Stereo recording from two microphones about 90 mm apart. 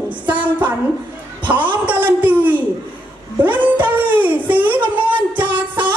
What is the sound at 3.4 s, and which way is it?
Music, 20° right (ahead or behind).